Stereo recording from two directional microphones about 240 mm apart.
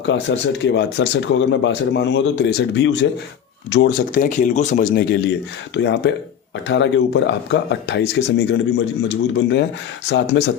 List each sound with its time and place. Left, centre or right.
0.0 s speech: left
5.7 s speech: left